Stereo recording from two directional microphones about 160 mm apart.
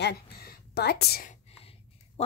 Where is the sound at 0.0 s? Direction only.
80° left.